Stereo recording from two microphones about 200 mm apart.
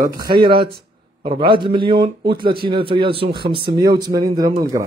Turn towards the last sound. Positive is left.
turn(degrees=-15)  # may be behind; listen again after turning